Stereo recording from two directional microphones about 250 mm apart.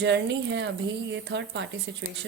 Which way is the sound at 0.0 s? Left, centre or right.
Right.